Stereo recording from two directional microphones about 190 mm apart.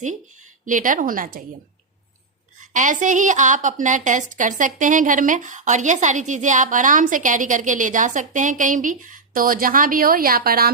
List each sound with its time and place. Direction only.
0.6 s a woman's voice: 45° right (ahead or behind)
2.7 s a woman's voice: 40° right (ahead or behind)